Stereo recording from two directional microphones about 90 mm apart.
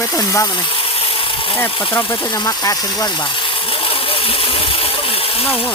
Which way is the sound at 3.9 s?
85° left.